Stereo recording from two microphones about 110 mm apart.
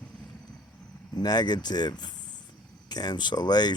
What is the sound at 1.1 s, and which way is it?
Speech, 40° left (ahead or behind).